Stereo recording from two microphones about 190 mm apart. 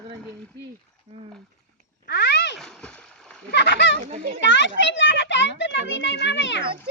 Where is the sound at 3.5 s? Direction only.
65° left (ahead or behind).